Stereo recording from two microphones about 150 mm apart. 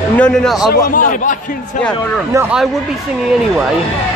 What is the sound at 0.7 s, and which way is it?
Speech, 70° left (ahead or behind).